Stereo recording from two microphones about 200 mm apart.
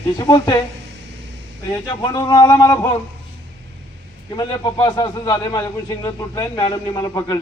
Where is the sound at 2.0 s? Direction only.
20° left (ahead or behind).